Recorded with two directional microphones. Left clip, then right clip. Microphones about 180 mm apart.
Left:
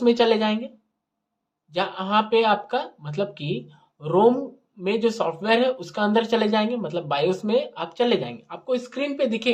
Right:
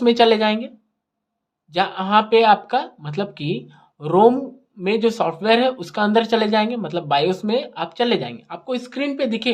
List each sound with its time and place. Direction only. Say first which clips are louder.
0.0 s speech: right 4 dB; 30° right (ahead or behind)
1.7 s speech: right 5 dB; 30° right (ahead or behind)